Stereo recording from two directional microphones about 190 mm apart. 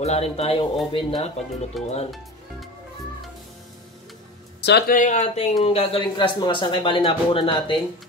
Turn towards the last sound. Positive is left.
turn(degrees=30)  # may be behind; listen again after turning